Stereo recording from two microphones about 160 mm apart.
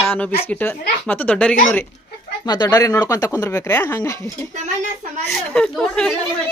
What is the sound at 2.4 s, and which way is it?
Speech, 25° left (ahead or behind).